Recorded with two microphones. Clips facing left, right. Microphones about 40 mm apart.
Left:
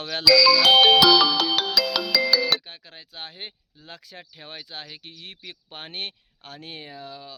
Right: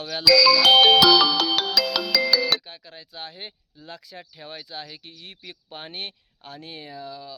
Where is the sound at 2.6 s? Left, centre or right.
Left.